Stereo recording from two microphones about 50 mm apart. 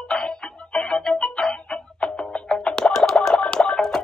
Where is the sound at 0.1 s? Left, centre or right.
Centre.